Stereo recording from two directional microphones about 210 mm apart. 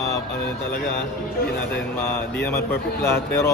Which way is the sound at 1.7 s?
10° left (ahead or behind).